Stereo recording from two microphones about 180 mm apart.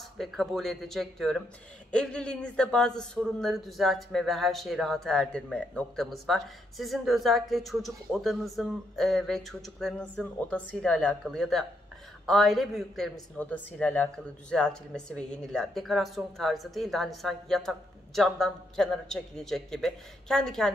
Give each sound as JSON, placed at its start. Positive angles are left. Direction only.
{"t": 0.2, "sound": "speech", "side_deg": 0}